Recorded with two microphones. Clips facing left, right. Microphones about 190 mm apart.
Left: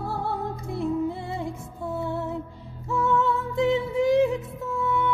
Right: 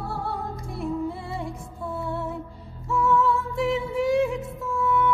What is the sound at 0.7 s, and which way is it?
Music, 20° left (ahead or behind).